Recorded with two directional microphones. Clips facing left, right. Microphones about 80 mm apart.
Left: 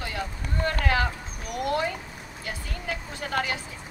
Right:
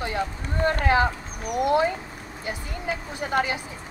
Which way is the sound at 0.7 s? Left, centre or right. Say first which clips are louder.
Right 5 dB; right.